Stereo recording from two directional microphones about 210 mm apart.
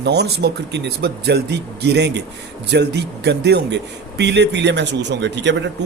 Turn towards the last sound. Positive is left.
turn(degrees=-55)  # may be behind; listen again after turning